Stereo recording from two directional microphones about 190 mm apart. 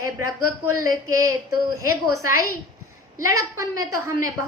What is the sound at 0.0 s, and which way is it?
Speech, 15° right (ahead or behind).